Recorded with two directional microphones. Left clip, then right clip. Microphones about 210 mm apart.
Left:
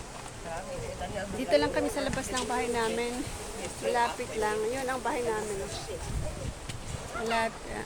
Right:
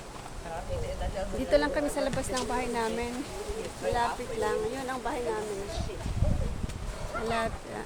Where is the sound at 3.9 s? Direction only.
25° left (ahead or behind).